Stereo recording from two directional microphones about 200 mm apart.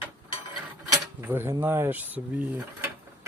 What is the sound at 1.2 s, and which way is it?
Speech, 10° right (ahead or behind).